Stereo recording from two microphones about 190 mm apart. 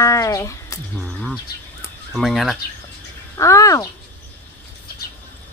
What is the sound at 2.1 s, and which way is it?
Speech, centre (ahead or behind).